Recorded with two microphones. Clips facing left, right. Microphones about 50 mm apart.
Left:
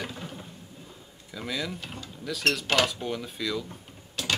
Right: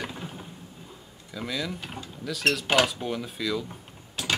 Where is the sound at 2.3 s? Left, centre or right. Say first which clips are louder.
Right 2 dB; centre.